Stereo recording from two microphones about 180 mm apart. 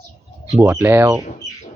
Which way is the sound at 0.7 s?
15° right (ahead or behind).